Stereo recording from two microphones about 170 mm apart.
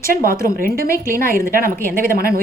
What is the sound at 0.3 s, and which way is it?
A woman's voice, 60° right (ahead or behind).